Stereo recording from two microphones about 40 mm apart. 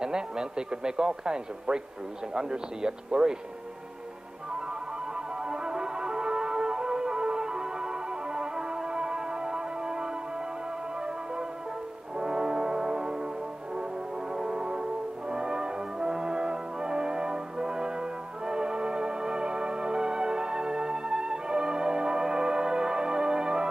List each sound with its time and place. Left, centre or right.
0.0 s a man's voice: centre
5.1 s music: centre
12.2 s brass instrument: right
14.3 s brass instrument: right